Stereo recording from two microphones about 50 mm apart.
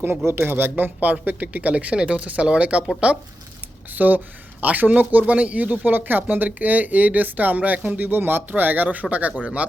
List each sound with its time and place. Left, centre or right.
0.3 s speech: right
3.9 s speech: right